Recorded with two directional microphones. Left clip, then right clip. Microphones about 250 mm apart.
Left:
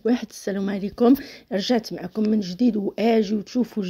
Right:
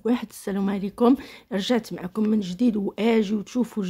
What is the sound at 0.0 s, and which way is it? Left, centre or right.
Speech, centre.